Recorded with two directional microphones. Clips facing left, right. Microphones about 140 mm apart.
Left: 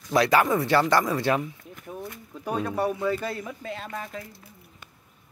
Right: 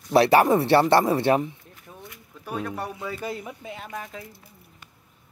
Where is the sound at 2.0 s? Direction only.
40° left (ahead or behind).